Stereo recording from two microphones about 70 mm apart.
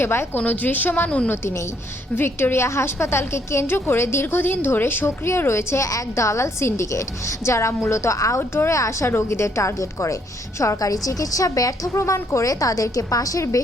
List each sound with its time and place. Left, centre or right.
0.0 s a woman's voice: left
0.3 s a woman's voice: left
1.3 s a woman's voice: left
8.4 s a woman's voice: left